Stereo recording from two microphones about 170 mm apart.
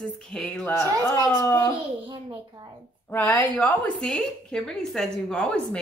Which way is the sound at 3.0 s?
10° left (ahead or behind).